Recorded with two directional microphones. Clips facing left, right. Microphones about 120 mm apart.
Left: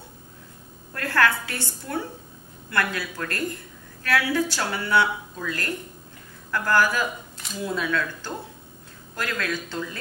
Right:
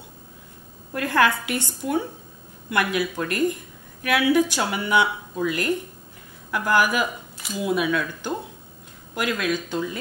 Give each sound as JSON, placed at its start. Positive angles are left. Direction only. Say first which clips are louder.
{"t": 0.9, "sound": "speech", "louder": "right 2 dB", "side_deg": -15}